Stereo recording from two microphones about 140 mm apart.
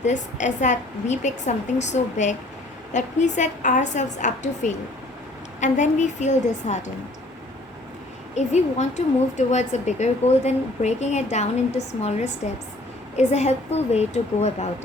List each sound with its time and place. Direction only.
0.0 s a woman's voice: 60° left (ahead or behind)
8.4 s a woman's voice: 55° left (ahead or behind)